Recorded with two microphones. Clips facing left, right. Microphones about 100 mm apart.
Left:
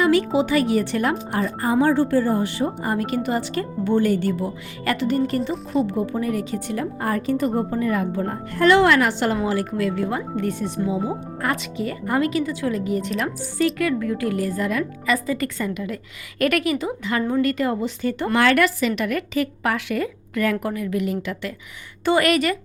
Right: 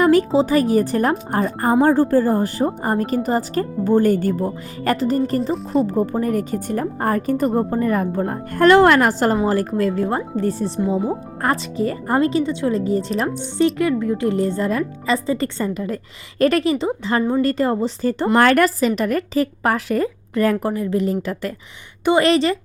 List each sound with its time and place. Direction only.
0.0 s speech: 45° right (ahead or behind)
22.0 s speech: 25° right (ahead or behind)